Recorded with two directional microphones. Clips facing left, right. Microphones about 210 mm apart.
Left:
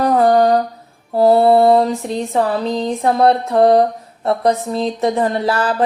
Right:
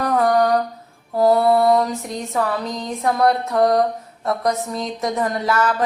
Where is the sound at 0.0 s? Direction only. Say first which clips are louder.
Left 5 dB; 30° left (ahead or behind).